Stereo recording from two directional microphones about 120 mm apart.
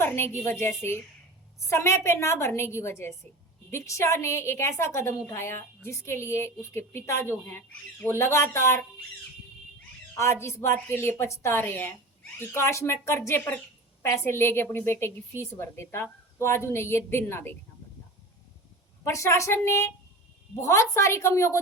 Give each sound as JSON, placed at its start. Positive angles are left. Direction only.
{"t": 0.0, "sound": "a woman's voice", "side_deg": 20}
{"t": 10.2, "sound": "a woman's voice", "side_deg": 25}
{"t": 19.0, "sound": "a woman's voice", "side_deg": 25}